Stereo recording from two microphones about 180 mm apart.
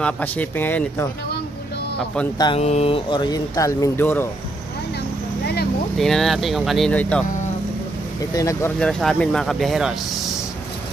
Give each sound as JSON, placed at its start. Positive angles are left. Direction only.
{"t": 0.0, "sound": "speech", "side_deg": 10}
{"t": 2.3, "sound": "speech", "side_deg": 25}
{"t": 2.6, "sound": "speech", "side_deg": 35}
{"t": 5.9, "sound": "speech", "side_deg": 0}
{"t": 8.4, "sound": "speech", "side_deg": 20}
{"t": 8.7, "sound": "speech", "side_deg": 5}